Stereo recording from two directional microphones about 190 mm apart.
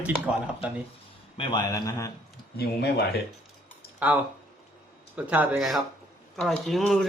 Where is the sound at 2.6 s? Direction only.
55° left (ahead or behind).